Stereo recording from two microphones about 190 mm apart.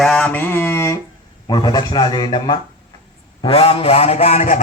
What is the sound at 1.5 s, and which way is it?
A man's voice, 20° left (ahead or behind).